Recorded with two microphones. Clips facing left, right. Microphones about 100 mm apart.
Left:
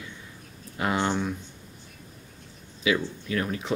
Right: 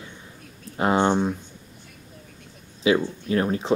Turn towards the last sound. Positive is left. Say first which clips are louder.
# right 6 dB
turn(degrees=-30)  # may be behind; listen again after turning